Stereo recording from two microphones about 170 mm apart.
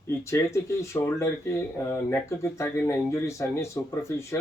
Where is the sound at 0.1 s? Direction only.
15° left (ahead or behind).